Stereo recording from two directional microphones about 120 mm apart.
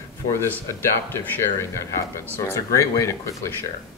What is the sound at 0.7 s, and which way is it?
Speech, 20° left (ahead or behind).